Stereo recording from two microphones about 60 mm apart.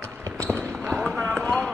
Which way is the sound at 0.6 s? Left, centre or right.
Centre.